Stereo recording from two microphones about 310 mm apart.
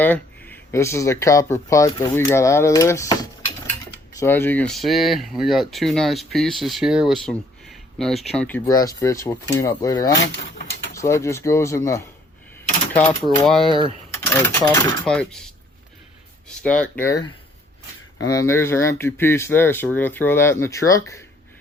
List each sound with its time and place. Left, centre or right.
0.0 s speech: centre
10.3 s a sound: left
10.9 s speech: centre
16.6 s speech: centre